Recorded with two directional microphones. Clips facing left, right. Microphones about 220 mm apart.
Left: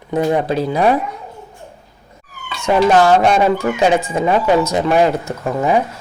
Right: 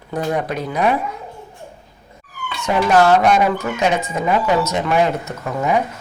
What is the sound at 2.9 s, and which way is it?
Speech, 30° left (ahead or behind).